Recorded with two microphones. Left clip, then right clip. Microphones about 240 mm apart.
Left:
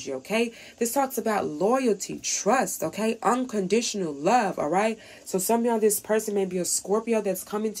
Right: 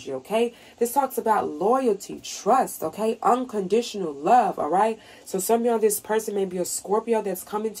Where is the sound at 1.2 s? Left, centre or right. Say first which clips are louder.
Right 3 dB; left.